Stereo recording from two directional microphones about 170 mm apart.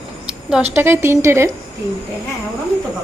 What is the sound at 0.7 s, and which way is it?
Speech, 15° right (ahead or behind).